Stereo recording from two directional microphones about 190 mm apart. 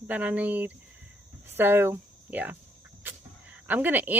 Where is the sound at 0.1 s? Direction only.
10° right (ahead or behind).